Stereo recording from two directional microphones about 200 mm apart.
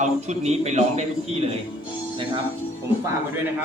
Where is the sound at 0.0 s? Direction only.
35° right (ahead or behind).